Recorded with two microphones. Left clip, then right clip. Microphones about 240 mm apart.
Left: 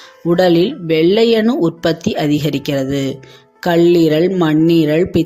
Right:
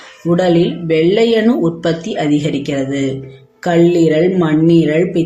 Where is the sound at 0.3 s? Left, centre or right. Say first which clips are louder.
Left 1 dB; left.